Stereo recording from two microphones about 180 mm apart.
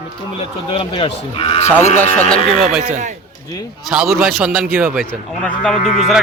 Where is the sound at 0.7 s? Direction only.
30° left (ahead or behind).